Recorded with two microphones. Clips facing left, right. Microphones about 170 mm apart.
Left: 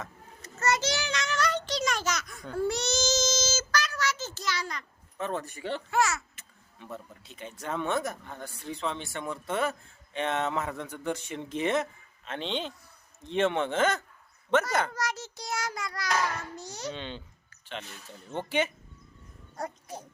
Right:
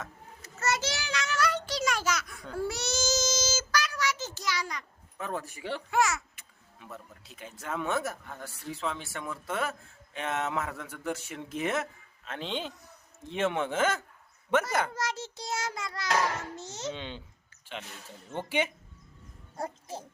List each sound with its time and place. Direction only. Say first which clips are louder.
0.0 s child singing: left 1 dB; 5° right (ahead or behind)
6.7 s speech: left 4 dB; centre (ahead or behind)
14.9 s child singing: even; 25° right (ahead or behind)
16.9 s speech: left 1 dB; 10° right (ahead or behind)
18.3 s speech: left 1 dB; 10° right (ahead or behind)
19.5 s speech: even; 25° right (ahead or behind)